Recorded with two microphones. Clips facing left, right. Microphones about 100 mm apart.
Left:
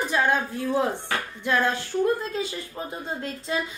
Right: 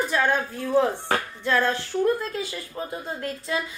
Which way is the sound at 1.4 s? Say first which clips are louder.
Left 1 dB; 15° left (ahead or behind).